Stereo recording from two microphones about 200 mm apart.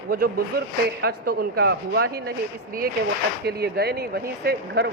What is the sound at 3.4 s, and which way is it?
Speech, 55° right (ahead or behind).